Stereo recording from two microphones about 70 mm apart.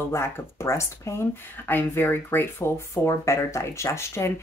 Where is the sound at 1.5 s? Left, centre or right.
Left.